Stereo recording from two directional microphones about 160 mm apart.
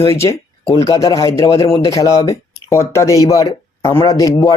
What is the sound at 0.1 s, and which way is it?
Speech, 15° left (ahead or behind).